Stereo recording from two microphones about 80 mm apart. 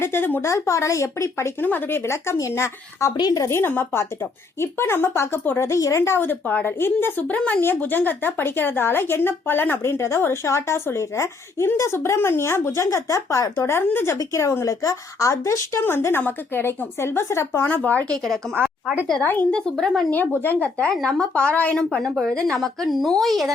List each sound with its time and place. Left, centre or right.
0.0 s speech: left
0.4 s speech: left
1.6 s speech: left
2.0 s speech: left
3.2 s a woman's voice: left
3.4 s speech: left
6.0 s speech: left
19.2 s speech: left
19.5 s speech: centre
20.1 s a woman's voice: left; by 23.5 s centre